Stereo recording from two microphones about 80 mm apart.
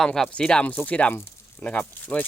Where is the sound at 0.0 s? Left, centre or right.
Centre.